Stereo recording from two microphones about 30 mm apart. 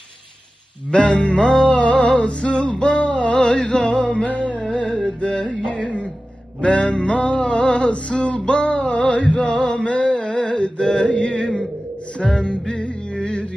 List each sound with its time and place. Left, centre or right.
0.9 s music: left
3.4 s music: left
7.9 s male singing: left
9.6 s music: left
9.8 s a sound: left
12.4 s music: left